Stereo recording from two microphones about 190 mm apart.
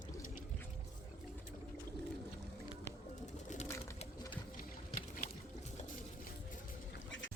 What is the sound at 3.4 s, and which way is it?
Bird, 40° left (ahead or behind).